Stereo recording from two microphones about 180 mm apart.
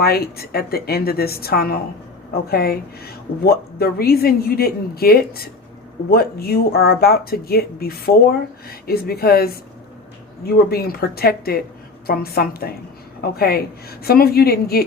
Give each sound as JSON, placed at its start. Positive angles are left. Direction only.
{"t": 0.0, "sound": "speech", "side_deg": 60}